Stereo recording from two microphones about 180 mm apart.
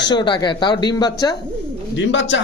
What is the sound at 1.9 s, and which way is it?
Speech, 90° left.